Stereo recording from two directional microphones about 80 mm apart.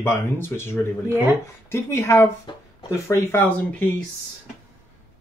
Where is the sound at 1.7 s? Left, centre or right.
Left.